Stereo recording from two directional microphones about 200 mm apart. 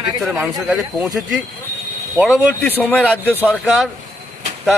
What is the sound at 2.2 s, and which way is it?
Speech, centre (ahead or behind).